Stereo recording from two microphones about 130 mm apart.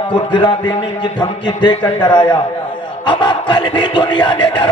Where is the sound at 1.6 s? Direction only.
40° left (ahead or behind).